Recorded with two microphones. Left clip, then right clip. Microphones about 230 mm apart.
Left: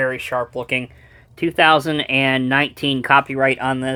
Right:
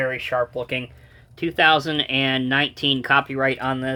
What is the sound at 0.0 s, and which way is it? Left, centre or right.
Speech, left.